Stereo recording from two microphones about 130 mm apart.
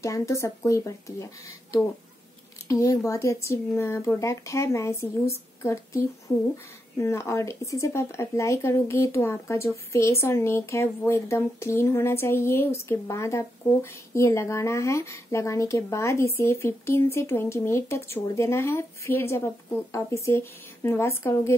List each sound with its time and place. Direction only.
0.0 s speech: 25° left (ahead or behind)